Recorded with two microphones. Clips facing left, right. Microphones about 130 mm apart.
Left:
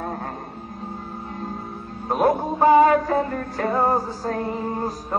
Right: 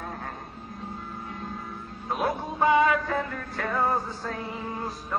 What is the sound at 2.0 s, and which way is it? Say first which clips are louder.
Music: left 8 dB; 45° left (ahead or behind).